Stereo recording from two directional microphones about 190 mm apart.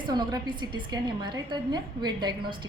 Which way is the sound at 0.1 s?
20° right (ahead or behind).